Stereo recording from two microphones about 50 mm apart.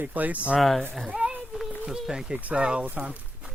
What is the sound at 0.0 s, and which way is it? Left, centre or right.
Speech, right.